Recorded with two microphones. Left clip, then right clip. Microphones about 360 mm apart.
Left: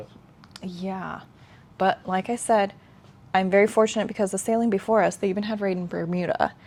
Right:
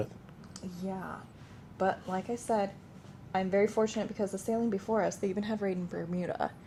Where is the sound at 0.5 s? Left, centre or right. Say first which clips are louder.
Left 7 dB; left.